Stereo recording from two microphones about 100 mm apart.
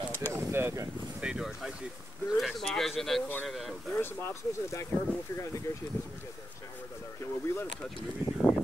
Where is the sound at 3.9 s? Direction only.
20° left (ahead or behind).